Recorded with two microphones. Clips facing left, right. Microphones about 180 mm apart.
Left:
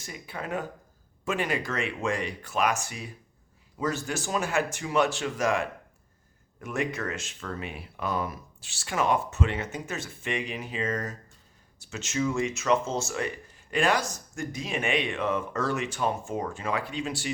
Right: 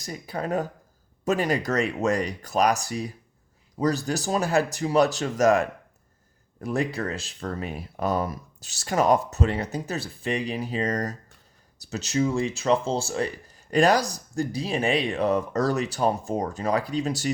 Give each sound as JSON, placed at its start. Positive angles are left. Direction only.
{"t": 0.0, "sound": "speech", "side_deg": -40}